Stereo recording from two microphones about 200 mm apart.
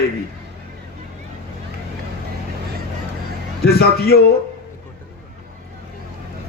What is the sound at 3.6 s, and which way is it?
Speech, 50° left (ahead or behind).